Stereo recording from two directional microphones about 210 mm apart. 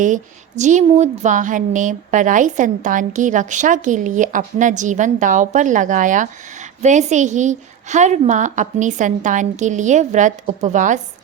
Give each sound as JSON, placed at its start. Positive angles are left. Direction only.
{"t": 0.0, "sound": "a woman's voice", "side_deg": -35}